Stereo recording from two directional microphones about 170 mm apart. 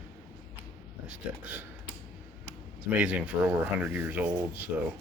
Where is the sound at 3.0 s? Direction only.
5° right (ahead or behind).